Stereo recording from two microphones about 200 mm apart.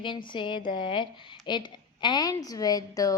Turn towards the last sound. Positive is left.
turn(degrees=15)  # may be behind; listen again after turning